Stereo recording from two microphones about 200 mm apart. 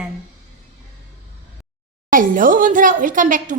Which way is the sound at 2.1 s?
40° right (ahead or behind).